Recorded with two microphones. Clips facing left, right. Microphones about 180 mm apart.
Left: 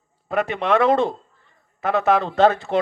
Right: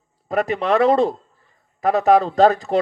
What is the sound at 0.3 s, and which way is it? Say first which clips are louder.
Speech: right 1 dB; 40° right (ahead or behind).